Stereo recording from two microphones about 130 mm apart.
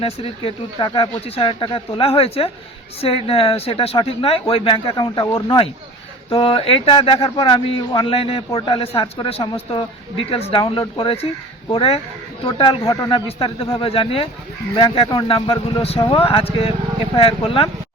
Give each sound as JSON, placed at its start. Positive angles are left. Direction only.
{"t": 0.0, "sound": "speech", "side_deg": 45}
{"t": 4.9, "sound": "speech", "side_deg": 30}
{"t": 6.3, "sound": "speech", "side_deg": 45}
{"t": 12.4, "sound": "speech", "side_deg": 40}
{"t": 12.8, "sound": "speech", "side_deg": 30}
{"t": 13.2, "sound": "speech", "side_deg": 50}
{"t": 14.8, "sound": "speech", "side_deg": 35}